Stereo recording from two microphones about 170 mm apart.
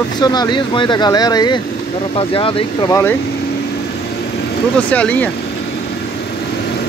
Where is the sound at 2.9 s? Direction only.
10° left (ahead or behind).